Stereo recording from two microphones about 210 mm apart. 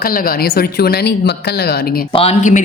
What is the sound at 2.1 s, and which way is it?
Speech, 30° left (ahead or behind).